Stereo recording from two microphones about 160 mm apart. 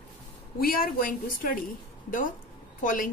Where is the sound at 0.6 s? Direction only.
65° left (ahead or behind).